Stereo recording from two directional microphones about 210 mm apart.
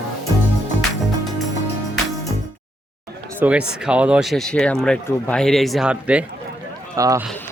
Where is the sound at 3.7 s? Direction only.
5° right (ahead or behind).